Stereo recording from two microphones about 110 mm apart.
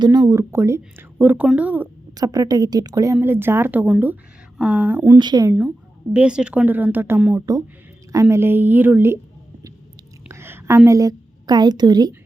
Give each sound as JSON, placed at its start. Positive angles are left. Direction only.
{"t": 0.0, "sound": "a woman's voice", "side_deg": -40}
{"t": 2.1, "sound": "a woman's voice", "side_deg": -35}
{"t": 5.1, "sound": "speech", "side_deg": -35}
{"t": 5.5, "sound": "a woman's voice", "side_deg": -10}
{"t": 7.3, "sound": "a woman's voice", "side_deg": -30}
{"t": 10.2, "sound": "a woman's voice", "side_deg": -20}